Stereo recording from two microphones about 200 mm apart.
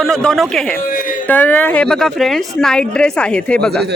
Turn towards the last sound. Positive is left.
turn(degrees=5)  # may be behind; listen again after turning